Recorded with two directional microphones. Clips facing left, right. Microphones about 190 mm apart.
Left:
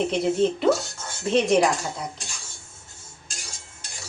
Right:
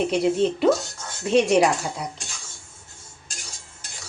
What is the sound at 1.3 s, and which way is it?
Speech, 10° right (ahead or behind).